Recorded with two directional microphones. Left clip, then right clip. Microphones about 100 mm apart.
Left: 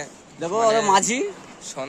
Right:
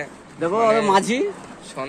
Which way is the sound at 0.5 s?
90° left.